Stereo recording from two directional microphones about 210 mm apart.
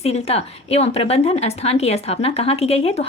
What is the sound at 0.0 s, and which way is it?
A woman's voice, 30° left (ahead or behind).